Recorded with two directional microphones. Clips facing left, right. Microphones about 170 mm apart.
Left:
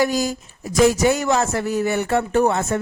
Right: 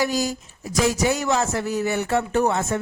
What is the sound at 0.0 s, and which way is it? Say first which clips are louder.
Speech: left 3 dB; 50° left (ahead or behind).